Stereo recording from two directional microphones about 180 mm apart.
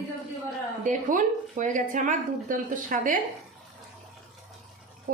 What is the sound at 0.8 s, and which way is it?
A woman's voice, 45° right (ahead or behind).